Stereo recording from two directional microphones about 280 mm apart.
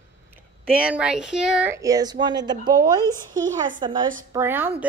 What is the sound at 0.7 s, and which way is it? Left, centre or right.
A woman's voice, centre.